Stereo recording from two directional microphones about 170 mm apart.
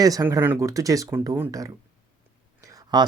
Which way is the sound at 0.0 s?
20° right (ahead or behind).